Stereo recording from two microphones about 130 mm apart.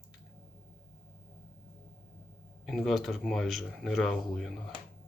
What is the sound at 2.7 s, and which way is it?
Speech, centre (ahead or behind).